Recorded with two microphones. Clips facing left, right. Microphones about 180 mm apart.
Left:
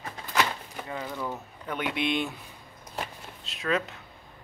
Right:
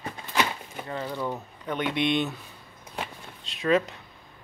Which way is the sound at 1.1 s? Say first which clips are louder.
Right 4 dB; 10° right (ahead or behind).